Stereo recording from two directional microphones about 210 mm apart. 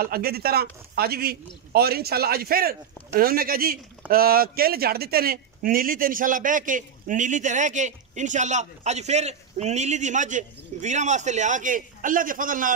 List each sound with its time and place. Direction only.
0.0 s a man's voice: 45° right (ahead or behind)